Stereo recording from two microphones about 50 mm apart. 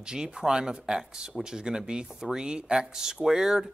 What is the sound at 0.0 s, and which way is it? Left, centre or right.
A man's voice, centre.